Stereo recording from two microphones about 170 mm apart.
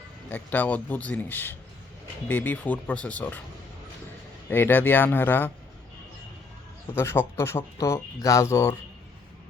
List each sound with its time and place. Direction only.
0.3 s speech: 10° left (ahead or behind)
4.4 s speech: 10° left (ahead or behind)
6.9 s speech: 15° left (ahead or behind)